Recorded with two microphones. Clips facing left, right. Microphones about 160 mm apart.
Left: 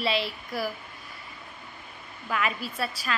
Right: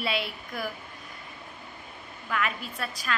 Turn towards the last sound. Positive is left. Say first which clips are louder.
# left 3 dB
turn(degrees=5)  # may be behind; listen again after turning